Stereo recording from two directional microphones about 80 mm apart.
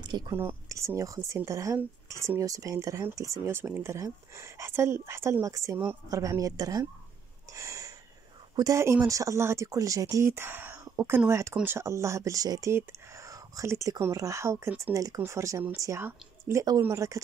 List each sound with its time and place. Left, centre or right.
0.1 s speech: right
0.7 s speech: right
7.5 s a sound: right
8.6 s speech: right
9.0 s speech: right
10.3 s speech: right
16.9 s speech: right